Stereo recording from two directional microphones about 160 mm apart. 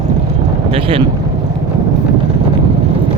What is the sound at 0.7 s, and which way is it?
Speech, 35° right (ahead or behind).